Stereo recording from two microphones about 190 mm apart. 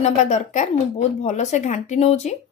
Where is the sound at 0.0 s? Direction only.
40° left (ahead or behind).